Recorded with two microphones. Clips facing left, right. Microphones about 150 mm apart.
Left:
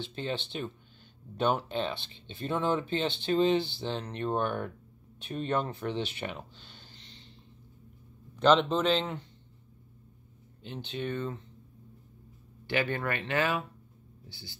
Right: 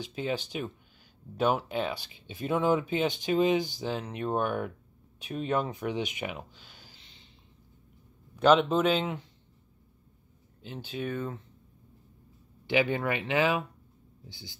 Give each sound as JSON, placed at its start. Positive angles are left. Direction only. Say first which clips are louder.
{"t": 0.0, "sound": "speech", "louder": "right 2 dB", "side_deg": -10}
{"t": 8.4, "sound": "speech", "louder": "right 2 dB", "side_deg": -10}
{"t": 10.6, "sound": "speech", "louder": "right 1 dB", "side_deg": -5}
{"t": 12.6, "sound": "speech", "louder": "right 4 dB", "side_deg": -15}